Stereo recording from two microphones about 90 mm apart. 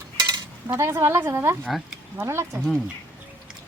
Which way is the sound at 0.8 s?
30° right (ahead or behind).